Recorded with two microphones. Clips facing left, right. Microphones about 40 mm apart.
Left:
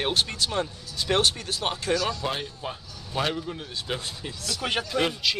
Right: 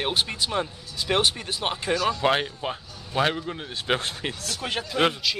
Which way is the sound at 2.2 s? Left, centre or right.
Right.